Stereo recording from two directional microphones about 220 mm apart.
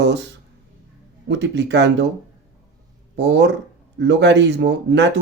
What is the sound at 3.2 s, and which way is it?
Speech, 50° right (ahead or behind).